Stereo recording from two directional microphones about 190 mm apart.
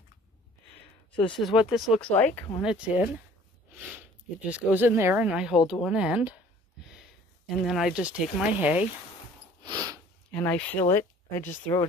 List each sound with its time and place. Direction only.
1.4 s speech: centre (ahead or behind)
2.6 s speech: 5° right (ahead or behind)
4.5 s speech: 10° right (ahead or behind)
7.4 s speech: centre (ahead or behind)
9.6 s snort: 20° right (ahead or behind)
10.3 s speech: 10° left (ahead or behind)